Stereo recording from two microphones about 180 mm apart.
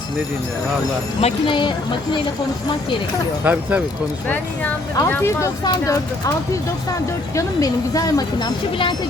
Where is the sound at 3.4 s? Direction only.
10° right (ahead or behind).